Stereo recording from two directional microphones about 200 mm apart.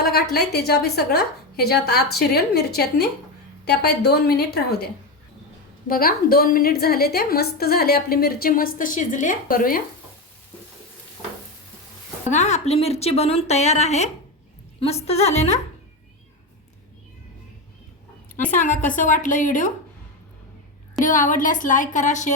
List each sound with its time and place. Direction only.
0.0 s a woman's voice: 50° left (ahead or behind)
5.9 s a woman's voice: 45° left (ahead or behind)
12.3 s speech: 35° left (ahead or behind)
18.5 s speech: 40° left (ahead or behind)
21.0 s speech: 40° left (ahead or behind)